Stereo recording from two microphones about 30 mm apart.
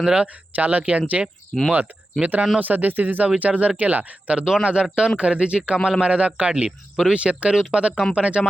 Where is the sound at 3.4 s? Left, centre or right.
Right.